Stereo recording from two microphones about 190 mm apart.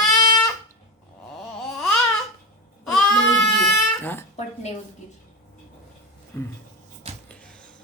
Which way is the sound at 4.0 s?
10° left (ahead or behind).